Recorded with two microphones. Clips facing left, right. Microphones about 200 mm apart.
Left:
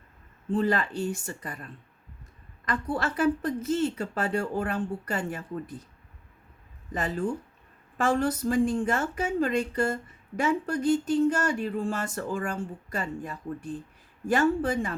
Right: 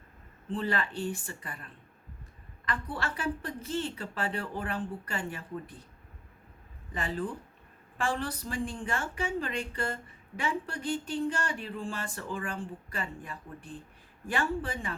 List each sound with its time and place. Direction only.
0.5 s speech: 40° left (ahead or behind)
2.6 s a woman's voice: 40° left (ahead or behind)
6.9 s a woman's voice: 45° left (ahead or behind)